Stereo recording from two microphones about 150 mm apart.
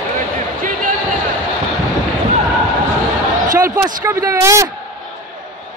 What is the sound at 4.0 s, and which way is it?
Speech, 20° right (ahead or behind).